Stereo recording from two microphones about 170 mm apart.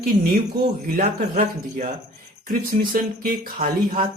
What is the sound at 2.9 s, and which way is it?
Speech, 55° right (ahead or behind).